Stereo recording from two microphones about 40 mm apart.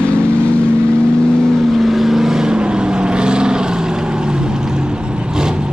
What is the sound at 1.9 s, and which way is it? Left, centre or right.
Vehicle, centre.